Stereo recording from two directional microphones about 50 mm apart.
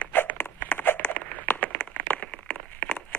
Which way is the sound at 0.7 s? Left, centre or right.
Left.